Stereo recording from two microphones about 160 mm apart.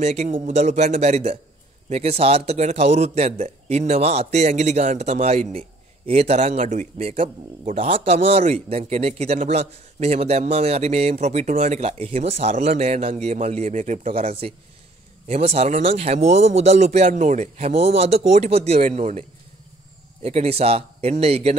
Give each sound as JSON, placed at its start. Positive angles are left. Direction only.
{"t": 0.0, "sound": "a man's voice", "side_deg": -45}
{"t": 20.2, "sound": "a man's voice", "side_deg": -40}